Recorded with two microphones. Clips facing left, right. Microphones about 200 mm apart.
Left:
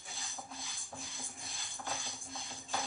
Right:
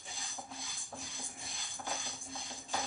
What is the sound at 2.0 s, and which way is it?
Music, 15° right (ahead or behind).